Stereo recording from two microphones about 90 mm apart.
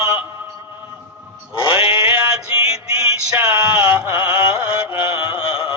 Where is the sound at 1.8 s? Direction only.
90° left.